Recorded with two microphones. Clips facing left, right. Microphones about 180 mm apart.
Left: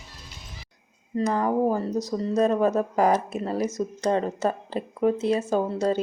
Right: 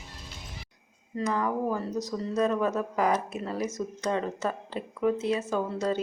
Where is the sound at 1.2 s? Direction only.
35° left (ahead or behind).